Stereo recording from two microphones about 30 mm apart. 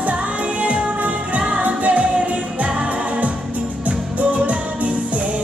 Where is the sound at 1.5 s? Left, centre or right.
Right.